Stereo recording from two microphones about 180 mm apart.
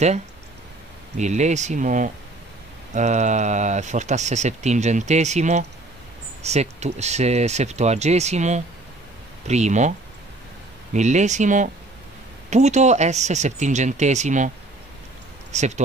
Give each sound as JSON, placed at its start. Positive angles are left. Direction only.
{"t": 1.1, "sound": "speech", "side_deg": -40}
{"t": 15.5, "sound": "speech", "side_deg": -40}